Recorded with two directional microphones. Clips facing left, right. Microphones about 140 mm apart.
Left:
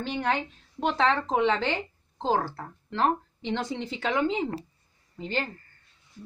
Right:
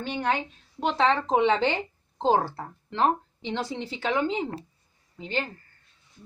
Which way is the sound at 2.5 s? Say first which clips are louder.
Even; 10° right (ahead or behind).